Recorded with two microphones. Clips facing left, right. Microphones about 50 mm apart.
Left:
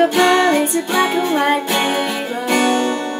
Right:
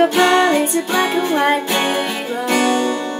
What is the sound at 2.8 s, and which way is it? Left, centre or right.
Music, left.